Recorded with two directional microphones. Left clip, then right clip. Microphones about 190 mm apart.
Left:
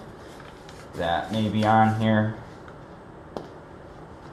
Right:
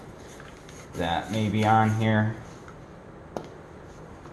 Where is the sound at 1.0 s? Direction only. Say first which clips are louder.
Left 2 dB; 35° right (ahead or behind).